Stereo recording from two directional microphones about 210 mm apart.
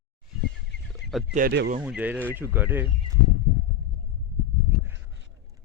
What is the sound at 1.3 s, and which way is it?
Speech, 50° right (ahead or behind).